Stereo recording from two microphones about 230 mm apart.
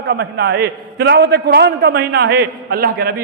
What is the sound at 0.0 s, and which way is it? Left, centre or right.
A man's voice, right.